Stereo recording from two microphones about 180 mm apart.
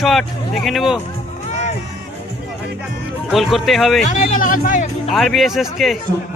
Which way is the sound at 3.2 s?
Centre (ahead or behind).